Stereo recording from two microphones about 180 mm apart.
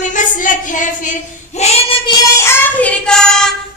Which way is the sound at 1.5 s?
35° left (ahead or behind).